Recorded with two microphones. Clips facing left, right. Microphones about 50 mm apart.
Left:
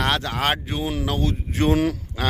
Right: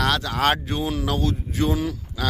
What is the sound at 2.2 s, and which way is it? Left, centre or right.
Speech, left.